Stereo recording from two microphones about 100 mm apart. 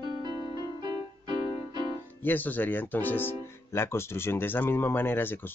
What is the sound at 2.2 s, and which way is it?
Speech, 20° left (ahead or behind).